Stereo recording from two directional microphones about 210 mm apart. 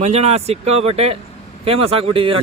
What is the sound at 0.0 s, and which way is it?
Speech, 30° right (ahead or behind).